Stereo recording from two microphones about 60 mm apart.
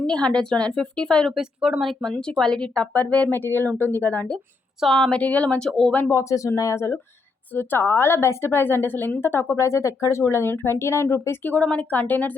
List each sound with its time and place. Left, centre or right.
0.0 s speech: centre
1.3 s a woman's voice: centre
1.8 s speech: centre
2.9 s speech: left
3.3 s a woman's voice: left
4.9 s speech: centre
5.1 s speech: left
5.5 s speech: centre
5.9 s a woman's voice: left
6.1 s a woman's voice: left
7.5 s a woman's voice: left
11.6 s speech: left